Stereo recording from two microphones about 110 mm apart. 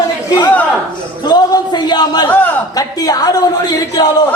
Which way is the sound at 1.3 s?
40° left (ahead or behind).